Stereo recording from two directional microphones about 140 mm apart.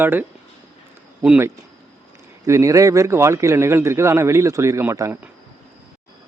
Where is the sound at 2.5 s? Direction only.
20° right (ahead or behind).